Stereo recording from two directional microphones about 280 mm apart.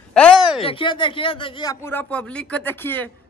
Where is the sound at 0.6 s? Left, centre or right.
Centre.